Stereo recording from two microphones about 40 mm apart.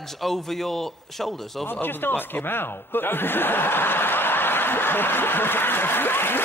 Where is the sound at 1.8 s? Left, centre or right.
Left.